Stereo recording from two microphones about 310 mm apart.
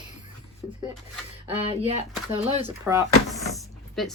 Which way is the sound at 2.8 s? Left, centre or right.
Centre.